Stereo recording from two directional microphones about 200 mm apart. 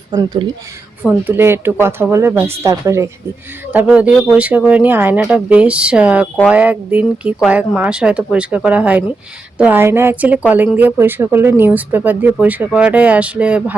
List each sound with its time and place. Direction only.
0.1 s a woman's voice: 20° right (ahead or behind)